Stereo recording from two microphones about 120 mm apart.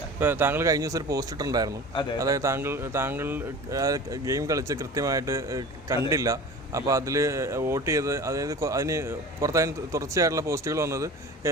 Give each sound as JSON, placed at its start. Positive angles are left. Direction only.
{"t": 0.2, "sound": "a man's voice", "side_deg": -15}
{"t": 1.9, "sound": "a man's voice", "side_deg": 40}
{"t": 2.1, "sound": "a man's voice", "side_deg": -25}